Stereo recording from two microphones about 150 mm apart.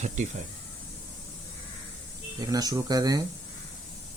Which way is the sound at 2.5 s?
25° right (ahead or behind).